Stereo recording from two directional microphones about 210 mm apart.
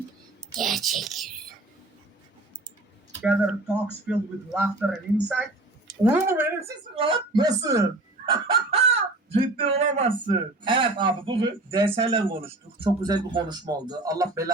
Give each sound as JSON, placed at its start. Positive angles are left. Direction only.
{"t": 0.5, "sound": "speech", "side_deg": 0}
{"t": 3.2, "sound": "speech", "side_deg": -5}
{"t": 6.0, "sound": "speech", "side_deg": -10}
{"t": 6.9, "sound": "speech", "side_deg": -25}
{"t": 8.3, "sound": "chicken", "side_deg": -25}
{"t": 10.2, "sound": "speech", "side_deg": -25}